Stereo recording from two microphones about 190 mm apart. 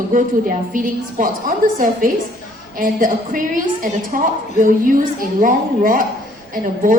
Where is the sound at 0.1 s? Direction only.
45° right (ahead or behind).